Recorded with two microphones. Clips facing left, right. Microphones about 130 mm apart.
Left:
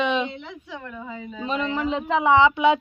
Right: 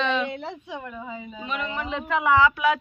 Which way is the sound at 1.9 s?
20° left (ahead or behind).